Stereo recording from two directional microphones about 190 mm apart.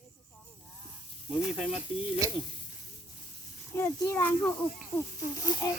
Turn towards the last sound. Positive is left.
turn(degrees=20)  # may be behind; listen again after turning